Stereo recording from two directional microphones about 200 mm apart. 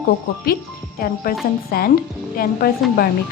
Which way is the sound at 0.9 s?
45° left (ahead or behind).